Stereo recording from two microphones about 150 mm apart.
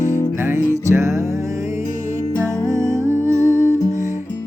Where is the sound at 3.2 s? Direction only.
20° right (ahead or behind).